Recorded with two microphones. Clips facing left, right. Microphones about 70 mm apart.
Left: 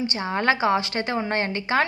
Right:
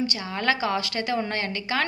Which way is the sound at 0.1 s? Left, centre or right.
Left.